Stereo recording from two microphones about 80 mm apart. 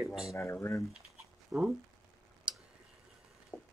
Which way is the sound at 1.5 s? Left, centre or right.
Centre.